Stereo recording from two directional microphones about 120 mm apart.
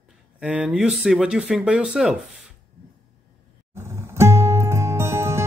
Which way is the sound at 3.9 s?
20° right (ahead or behind).